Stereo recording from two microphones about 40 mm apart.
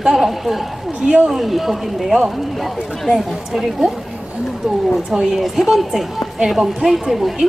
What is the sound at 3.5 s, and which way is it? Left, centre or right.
Speech, centre.